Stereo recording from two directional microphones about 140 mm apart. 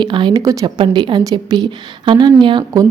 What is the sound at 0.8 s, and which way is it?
Speech, 35° right (ahead or behind).